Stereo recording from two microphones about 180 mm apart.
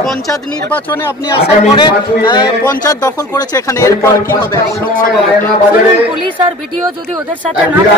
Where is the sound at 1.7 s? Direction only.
25° left (ahead or behind).